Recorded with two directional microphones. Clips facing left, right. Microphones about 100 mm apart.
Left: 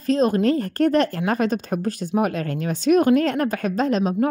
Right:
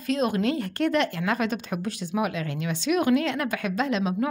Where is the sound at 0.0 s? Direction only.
35° left (ahead or behind).